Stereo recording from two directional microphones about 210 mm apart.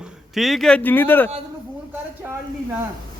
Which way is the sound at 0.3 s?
Centre (ahead or behind).